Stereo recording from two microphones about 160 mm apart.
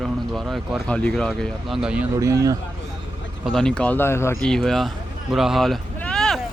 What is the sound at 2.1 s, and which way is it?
Speech, 20° right (ahead or behind).